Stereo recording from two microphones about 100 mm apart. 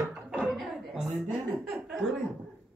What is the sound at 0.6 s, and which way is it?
Chuckle, 5° right (ahead or behind).